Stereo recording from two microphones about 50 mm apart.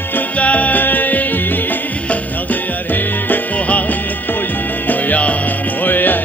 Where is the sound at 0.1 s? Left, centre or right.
Left.